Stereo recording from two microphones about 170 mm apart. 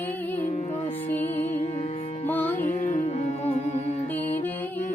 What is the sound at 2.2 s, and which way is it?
Music, 10° left (ahead or behind).